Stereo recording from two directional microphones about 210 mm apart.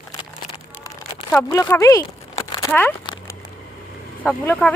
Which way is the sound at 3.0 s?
20° left (ahead or behind).